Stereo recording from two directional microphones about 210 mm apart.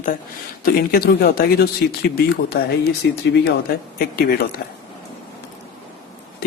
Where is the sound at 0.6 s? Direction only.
45° left (ahead or behind).